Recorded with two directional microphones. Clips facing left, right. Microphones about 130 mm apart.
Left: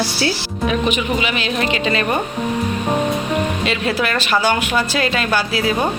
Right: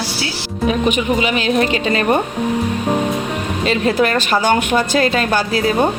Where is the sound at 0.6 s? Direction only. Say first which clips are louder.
Right 3 dB; 45° right (ahead or behind).